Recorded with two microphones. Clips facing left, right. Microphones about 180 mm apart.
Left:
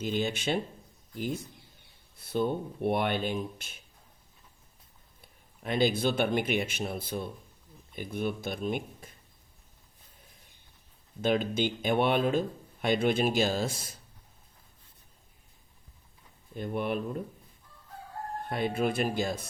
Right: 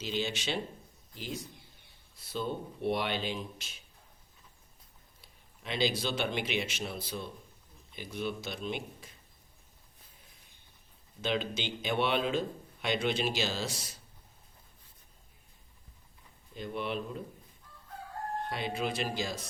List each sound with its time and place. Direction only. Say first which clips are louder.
0.0 s speech: left 4 dB; 50° left (ahead or behind)
5.2 s speech: left 6 dB; 50° left (ahead or behind)
11.2 s speech: left 6 dB; 50° left (ahead or behind)
16.6 s speech: left 4 dB; 50° left (ahead or behind)
18.4 s speech: left 7 dB; 50° left (ahead or behind)